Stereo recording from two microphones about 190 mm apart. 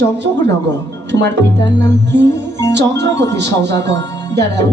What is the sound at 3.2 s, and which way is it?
Speech, 65° right (ahead or behind).